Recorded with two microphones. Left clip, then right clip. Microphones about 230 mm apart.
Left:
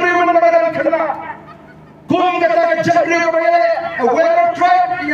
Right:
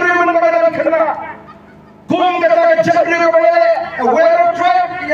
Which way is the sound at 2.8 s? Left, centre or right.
Left.